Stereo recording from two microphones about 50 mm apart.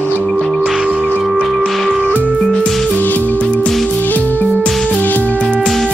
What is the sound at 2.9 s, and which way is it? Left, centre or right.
Music, left.